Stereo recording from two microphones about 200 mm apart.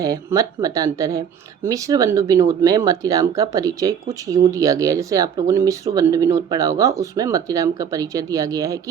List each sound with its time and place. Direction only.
0.0 s speech: 15° right (ahead or behind)